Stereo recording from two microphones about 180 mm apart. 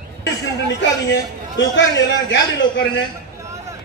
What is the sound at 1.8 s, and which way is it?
A man's voice, 90° left.